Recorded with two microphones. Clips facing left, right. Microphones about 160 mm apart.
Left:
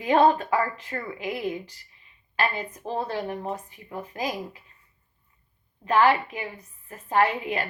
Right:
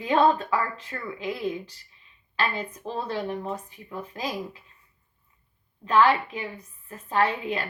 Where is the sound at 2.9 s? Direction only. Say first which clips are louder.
Even; 45° left (ahead or behind).